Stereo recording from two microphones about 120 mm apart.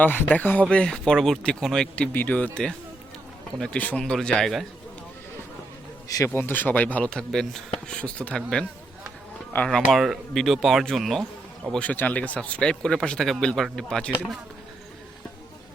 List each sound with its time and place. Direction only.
0.0 s speech: 15° left (ahead or behind)
6.1 s speech: 30° left (ahead or behind)
6.3 s speech: 15° left (ahead or behind)
9.6 s speech: centre (ahead or behind)
11.7 s speech: 10° left (ahead or behind)